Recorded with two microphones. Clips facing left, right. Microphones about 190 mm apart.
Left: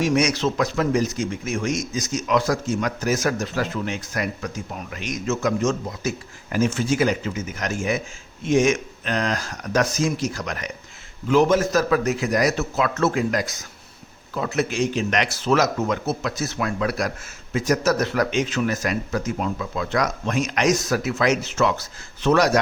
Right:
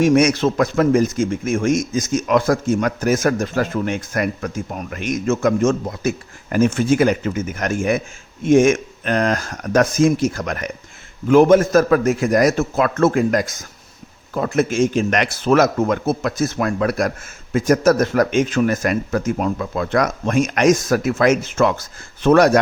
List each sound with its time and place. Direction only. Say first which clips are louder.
0.0 s speech: right 6 dB; 55° right (ahead or behind)